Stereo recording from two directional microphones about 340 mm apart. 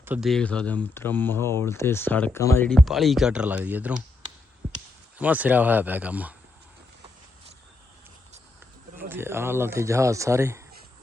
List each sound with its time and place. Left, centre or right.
0.0 s speech: centre
9.0 s speech: centre